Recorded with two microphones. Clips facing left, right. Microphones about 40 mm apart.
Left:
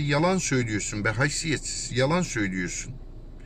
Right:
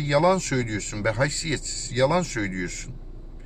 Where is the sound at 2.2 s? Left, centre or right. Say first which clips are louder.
Left 1 dB; left.